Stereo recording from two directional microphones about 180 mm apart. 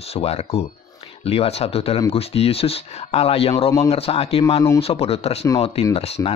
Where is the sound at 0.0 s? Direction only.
35° left (ahead or behind).